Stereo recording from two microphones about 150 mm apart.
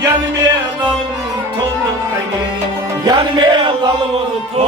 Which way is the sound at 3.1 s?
30° right (ahead or behind).